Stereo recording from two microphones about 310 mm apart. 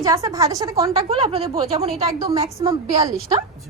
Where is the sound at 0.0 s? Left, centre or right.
Centre.